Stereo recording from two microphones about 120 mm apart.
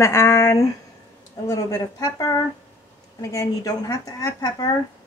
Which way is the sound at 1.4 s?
30° left (ahead or behind).